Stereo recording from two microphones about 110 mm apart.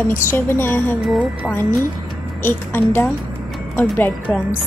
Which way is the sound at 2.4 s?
20° left (ahead or behind).